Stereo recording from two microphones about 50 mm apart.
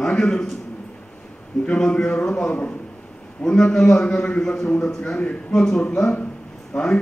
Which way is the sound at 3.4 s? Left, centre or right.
Centre.